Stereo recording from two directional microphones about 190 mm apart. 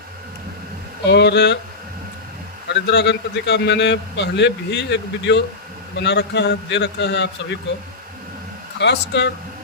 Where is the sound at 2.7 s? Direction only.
65° left (ahead or behind).